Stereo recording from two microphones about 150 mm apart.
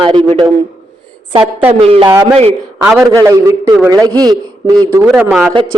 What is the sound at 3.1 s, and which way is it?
Speech, 20° right (ahead or behind).